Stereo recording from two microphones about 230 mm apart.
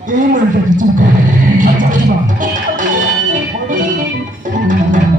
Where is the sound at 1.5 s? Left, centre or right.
Right.